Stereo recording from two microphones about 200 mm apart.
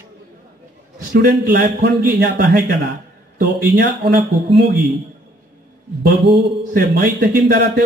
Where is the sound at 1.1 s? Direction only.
45° right (ahead or behind).